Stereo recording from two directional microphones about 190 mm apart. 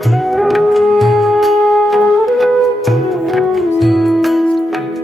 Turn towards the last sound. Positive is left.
turn(degrees=0)  # may be behind; listen again after turning